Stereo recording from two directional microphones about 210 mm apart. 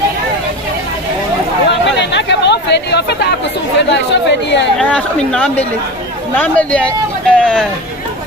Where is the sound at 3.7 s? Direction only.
55° left (ahead or behind).